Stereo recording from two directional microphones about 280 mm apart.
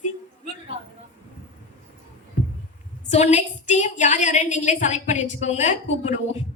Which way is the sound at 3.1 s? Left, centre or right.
Left.